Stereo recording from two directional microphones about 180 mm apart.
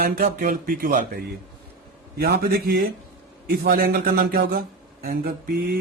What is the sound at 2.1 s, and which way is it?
A man's voice, 60° right (ahead or behind).